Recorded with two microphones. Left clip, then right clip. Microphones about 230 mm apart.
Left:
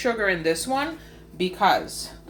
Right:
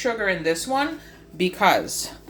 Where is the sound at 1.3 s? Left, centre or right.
Right.